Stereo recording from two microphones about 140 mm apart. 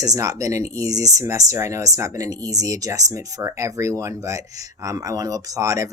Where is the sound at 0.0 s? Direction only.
25° right (ahead or behind).